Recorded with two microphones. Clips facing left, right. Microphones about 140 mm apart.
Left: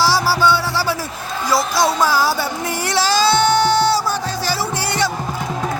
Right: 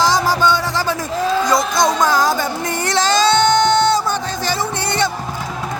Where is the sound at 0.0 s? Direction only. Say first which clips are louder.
Right 1 dB; 5° left (ahead or behind).